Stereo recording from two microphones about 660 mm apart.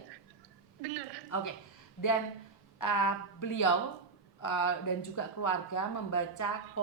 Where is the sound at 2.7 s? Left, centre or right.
Left.